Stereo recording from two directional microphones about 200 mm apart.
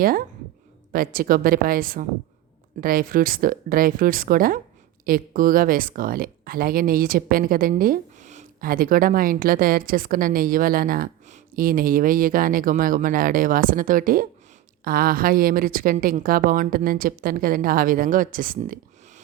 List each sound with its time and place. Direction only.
0.0 s speech: 45° right (ahead or behind)